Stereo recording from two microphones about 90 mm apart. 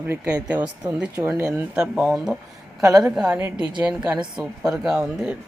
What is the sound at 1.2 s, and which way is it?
Speech, 25° right (ahead or behind).